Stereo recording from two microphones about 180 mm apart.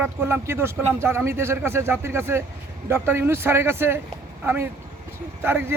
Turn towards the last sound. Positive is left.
turn(degrees=-10)  # may be behind; listen again after turning